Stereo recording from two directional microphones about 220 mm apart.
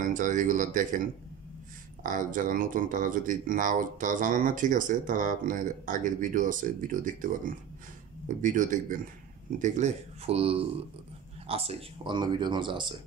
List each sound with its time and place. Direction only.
0.0 s speech: 35° right (ahead or behind)
2.0 s speech: 35° right (ahead or behind); by 12.9 s 20° right (ahead or behind)